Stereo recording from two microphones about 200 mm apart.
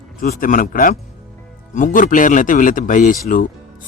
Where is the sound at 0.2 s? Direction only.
45° left (ahead or behind).